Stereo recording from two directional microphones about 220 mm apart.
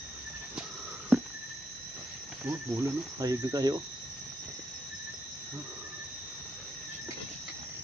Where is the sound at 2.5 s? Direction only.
15° right (ahead or behind).